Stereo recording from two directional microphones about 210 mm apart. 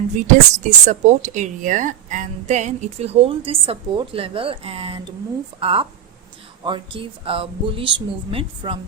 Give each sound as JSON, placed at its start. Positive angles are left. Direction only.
{"t": 0.3, "sound": "a woman's voice", "side_deg": -35}